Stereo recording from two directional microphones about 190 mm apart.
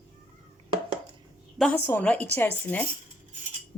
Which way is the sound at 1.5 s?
5° left (ahead or behind).